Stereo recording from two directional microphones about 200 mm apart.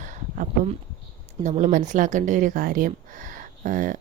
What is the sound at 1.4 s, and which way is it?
Speech, 35° right (ahead or behind).